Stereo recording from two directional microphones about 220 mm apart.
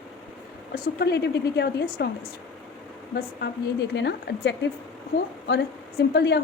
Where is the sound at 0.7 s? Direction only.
45° left (ahead or behind).